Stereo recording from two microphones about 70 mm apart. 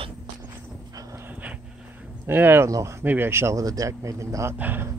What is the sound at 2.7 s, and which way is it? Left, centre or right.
Speech, right.